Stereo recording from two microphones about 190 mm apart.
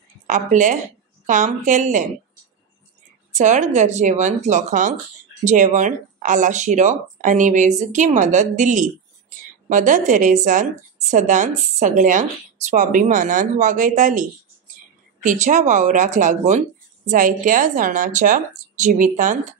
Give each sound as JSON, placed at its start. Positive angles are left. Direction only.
{"t": 0.3, "sound": "a woman's voice", "side_deg": -40}
{"t": 3.3, "sound": "a woman's voice", "side_deg": -40}
{"t": 15.2, "sound": "a woman's voice", "side_deg": -40}